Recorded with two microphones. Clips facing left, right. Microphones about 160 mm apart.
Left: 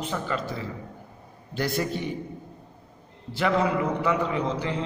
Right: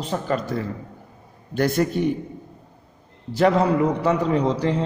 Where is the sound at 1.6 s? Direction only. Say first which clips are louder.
Right 7 dB; 50° right (ahead or behind).